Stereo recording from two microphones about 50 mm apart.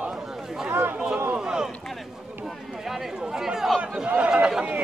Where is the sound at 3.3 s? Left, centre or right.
Centre.